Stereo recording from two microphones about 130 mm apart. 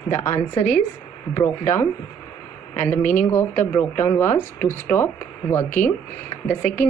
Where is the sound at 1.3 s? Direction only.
20° left (ahead or behind).